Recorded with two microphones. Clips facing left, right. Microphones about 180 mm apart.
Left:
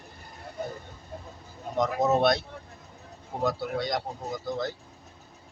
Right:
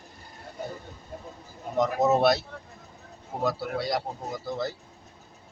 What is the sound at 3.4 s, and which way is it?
Speech, 5° right (ahead or behind).